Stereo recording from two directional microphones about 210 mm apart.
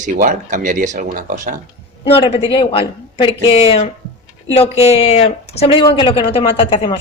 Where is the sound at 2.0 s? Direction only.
25° left (ahead or behind).